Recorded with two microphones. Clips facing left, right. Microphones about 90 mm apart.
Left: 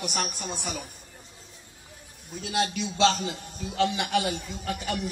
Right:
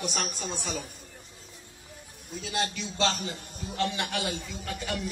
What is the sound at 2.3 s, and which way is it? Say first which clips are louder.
A man's voice: left 4 dB; 55° left (ahead or behind).